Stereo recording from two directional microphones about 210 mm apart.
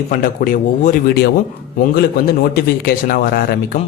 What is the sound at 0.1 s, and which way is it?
A man's voice, 40° left (ahead or behind).